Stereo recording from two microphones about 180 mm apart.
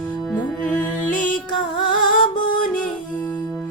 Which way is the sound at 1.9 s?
50° left (ahead or behind).